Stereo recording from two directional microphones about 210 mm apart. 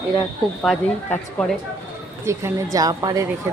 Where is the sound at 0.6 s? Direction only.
5° left (ahead or behind).